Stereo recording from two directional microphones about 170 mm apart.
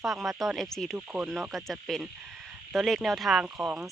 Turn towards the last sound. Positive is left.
turn(degrees=-5)  # may be behind; listen again after turning